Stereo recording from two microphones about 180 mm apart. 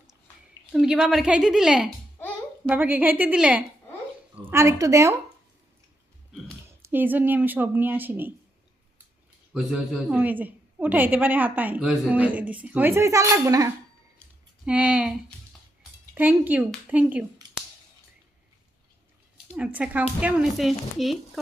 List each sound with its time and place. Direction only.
0.7 s a woman's voice: 5° right (ahead or behind)
6.7 s a woman's voice: 10° right (ahead or behind)
9.5 s a woman's voice: 5° right (ahead or behind)
14.6 s a woman's voice: 5° right (ahead or behind)
16.1 s a woman's voice: 10° right (ahead or behind)
19.5 s a woman's voice: 10° right (ahead or behind)